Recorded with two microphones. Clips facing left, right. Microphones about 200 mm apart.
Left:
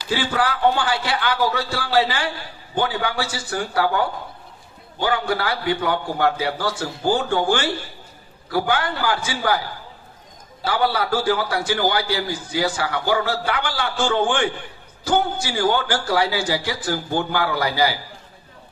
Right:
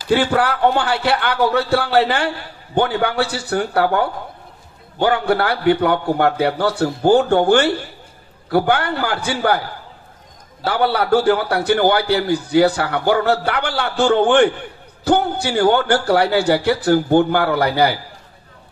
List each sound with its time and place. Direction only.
0.1 s speech: 60° right (ahead or behind)
10.6 s speech: 60° right (ahead or behind)